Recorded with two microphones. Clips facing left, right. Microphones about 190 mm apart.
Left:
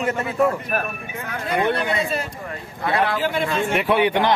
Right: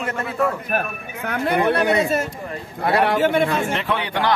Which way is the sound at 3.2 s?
55° right (ahead or behind).